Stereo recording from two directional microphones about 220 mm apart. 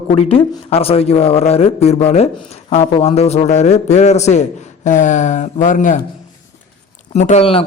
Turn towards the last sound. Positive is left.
turn(degrees=25)  # may be behind; listen again after turning